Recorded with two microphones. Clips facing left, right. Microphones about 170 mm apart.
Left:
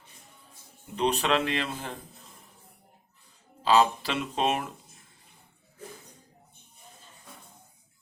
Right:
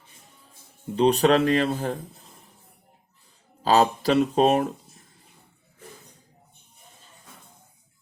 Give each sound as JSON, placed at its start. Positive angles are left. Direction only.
{"t": 0.9, "sound": "speech", "side_deg": -35}
{"t": 3.6, "sound": "speech", "side_deg": -40}